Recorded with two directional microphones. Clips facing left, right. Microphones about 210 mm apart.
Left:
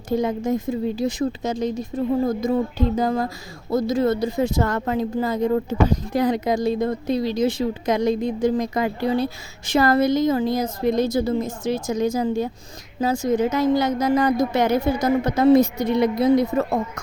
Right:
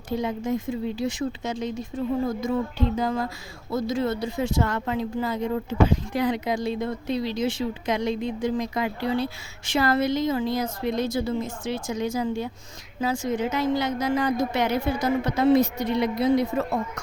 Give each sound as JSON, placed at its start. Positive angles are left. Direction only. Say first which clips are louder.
{"t": 0.1, "sound": "speech", "louder": "left 5 dB", "side_deg": 45}